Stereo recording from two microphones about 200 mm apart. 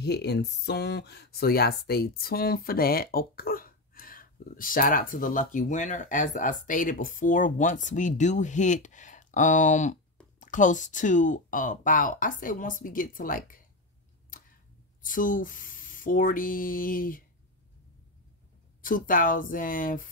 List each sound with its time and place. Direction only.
0.0 s speech: 55° left (ahead or behind)
14.3 s a sound: 45° left (ahead or behind)
15.0 s speech: 40° left (ahead or behind)
18.8 s speech: 45° left (ahead or behind)